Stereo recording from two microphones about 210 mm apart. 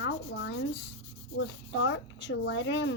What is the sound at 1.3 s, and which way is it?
Speech, 60° left (ahead or behind).